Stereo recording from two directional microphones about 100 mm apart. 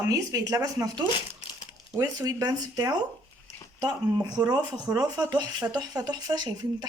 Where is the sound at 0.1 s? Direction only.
35° right (ahead or behind).